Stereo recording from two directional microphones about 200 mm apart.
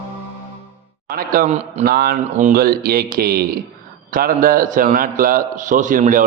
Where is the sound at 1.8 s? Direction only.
50° right (ahead or behind).